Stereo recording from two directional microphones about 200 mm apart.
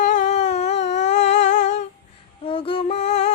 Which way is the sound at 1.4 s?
35° left (ahead or behind).